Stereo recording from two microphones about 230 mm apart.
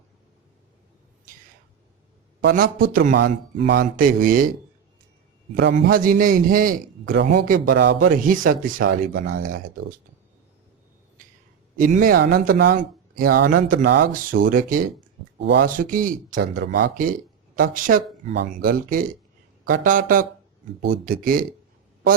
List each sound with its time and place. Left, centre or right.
2.4 s a man's voice: right
5.7 s speech: right
7.0 s a man's voice: right
7.3 s speech: right
11.8 s speech: right